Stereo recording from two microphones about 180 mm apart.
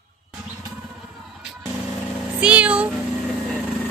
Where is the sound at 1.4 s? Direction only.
5° right (ahead or behind).